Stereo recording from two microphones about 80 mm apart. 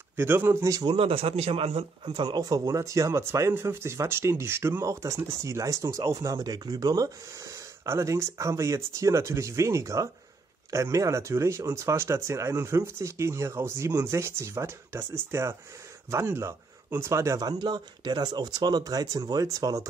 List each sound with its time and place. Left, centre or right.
0.1 s speech: right
2.2 s speech: right
7.3 s speech: right
17.4 s speech: right